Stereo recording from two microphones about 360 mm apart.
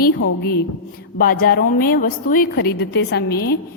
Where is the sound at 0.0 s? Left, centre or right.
Left.